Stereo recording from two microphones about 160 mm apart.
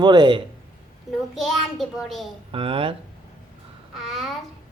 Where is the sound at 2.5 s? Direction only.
35° right (ahead or behind).